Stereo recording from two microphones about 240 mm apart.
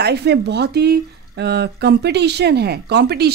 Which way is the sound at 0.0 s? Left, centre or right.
Right.